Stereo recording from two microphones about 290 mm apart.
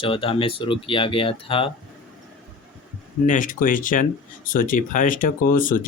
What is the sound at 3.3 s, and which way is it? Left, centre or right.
Speech, left.